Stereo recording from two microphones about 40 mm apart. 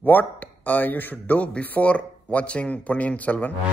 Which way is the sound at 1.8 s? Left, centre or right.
Left.